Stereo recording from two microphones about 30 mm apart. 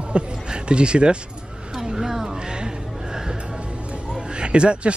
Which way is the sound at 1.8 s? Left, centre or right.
Centre.